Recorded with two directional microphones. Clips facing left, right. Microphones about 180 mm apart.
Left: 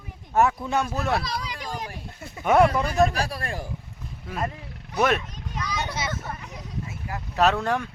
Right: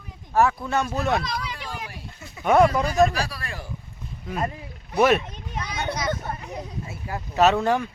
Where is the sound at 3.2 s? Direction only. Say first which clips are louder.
Left 3 dB; 50° left (ahead or behind).